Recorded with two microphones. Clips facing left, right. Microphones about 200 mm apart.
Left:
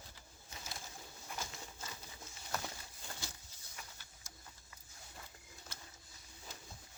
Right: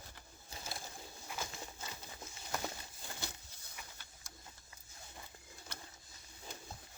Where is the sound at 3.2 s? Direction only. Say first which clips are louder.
Right 5 dB; 60° right (ahead or behind).